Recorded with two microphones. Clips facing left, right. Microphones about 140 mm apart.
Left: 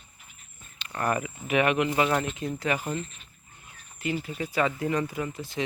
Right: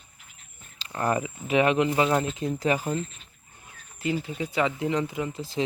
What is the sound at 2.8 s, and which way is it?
Speech, centre (ahead or behind).